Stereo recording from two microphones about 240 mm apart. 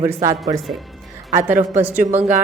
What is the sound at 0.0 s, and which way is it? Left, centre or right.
Speech, centre.